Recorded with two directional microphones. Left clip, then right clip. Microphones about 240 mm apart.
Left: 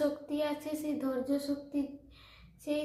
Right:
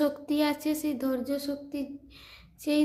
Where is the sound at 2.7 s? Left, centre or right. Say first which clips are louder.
Right 7 dB; right.